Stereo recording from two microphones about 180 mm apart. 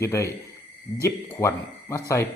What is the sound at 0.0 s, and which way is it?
Speech, 15° left (ahead or behind).